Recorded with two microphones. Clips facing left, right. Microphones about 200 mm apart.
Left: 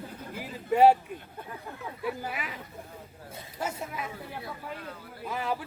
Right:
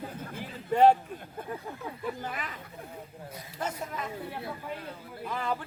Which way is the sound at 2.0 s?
10° left (ahead or behind).